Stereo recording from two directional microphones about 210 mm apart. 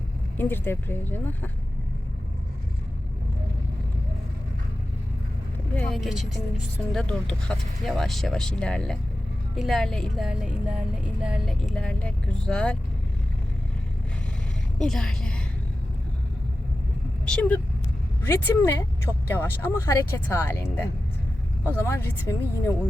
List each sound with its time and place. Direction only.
0.3 s speech: 10° left (ahead or behind)
5.7 s speech: 5° left (ahead or behind)
14.8 s a woman's voice: 5° left (ahead or behind)
17.2 s speech: 5° left (ahead or behind)